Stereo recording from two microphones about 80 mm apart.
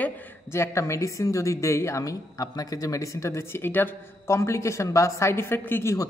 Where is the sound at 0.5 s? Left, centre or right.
Left.